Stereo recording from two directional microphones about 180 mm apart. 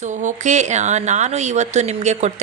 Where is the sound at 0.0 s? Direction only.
45° right (ahead or behind).